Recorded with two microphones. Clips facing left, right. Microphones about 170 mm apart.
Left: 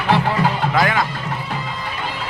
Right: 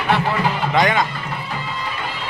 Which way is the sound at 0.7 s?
Centre (ahead or behind).